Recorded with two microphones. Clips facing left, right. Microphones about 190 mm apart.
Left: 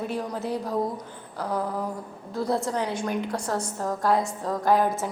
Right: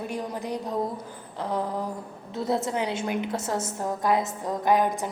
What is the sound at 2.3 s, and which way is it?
A woman's voice, 25° right (ahead or behind).